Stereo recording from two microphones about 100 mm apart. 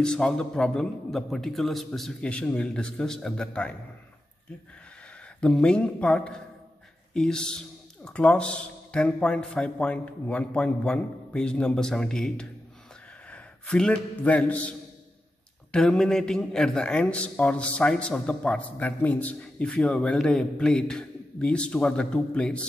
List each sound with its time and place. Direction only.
0.0 s a man's voice: 10° left (ahead or behind)
5.4 s a man's voice: 10° left (ahead or behind)